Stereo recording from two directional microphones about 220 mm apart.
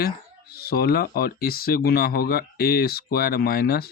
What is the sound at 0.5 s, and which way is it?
Speech, 45° left (ahead or behind).